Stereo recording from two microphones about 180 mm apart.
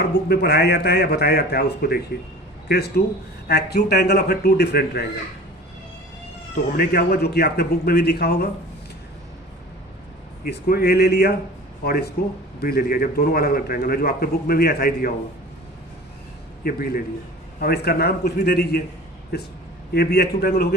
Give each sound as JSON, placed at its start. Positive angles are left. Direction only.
{"t": 0.1, "sound": "a man's voice", "side_deg": 65}
{"t": 6.7, "sound": "a man's voice", "side_deg": 60}
{"t": 10.4, "sound": "a man's voice", "side_deg": 60}
{"t": 16.6, "sound": "a man's voice", "side_deg": 55}
{"t": 19.9, "sound": "a man's voice", "side_deg": 60}